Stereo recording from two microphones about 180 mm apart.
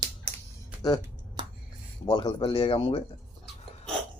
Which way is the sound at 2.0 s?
25° left (ahead or behind).